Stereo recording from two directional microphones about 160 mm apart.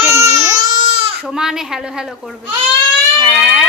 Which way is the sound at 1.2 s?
5° right (ahead or behind).